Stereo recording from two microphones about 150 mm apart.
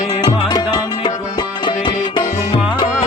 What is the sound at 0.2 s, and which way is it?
Music, 25° left (ahead or behind).